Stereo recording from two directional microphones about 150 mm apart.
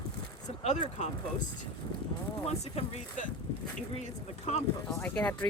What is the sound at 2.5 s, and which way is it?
Speech, 50° left (ahead or behind).